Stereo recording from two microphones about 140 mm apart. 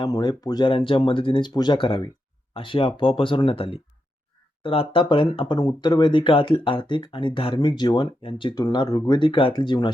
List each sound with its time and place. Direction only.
0.0 s speech: 30° left (ahead or behind)